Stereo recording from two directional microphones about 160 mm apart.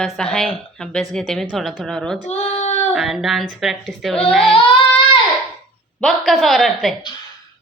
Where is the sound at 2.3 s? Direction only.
45° left (ahead or behind).